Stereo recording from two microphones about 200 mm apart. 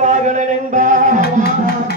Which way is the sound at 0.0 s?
35° right (ahead or behind).